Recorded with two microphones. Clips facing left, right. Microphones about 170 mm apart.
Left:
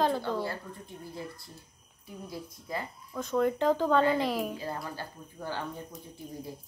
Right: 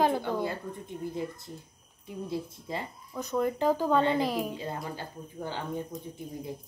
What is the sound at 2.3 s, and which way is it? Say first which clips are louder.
Speech: right 3 dB; 25° right (ahead or behind).